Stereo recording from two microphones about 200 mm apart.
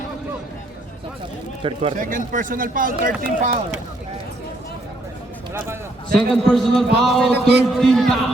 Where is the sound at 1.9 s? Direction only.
40° right (ahead or behind).